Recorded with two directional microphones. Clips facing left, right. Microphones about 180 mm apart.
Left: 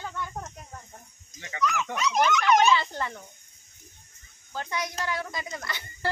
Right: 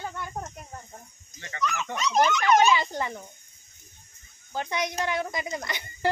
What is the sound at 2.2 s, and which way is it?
Speech, 15° right (ahead or behind).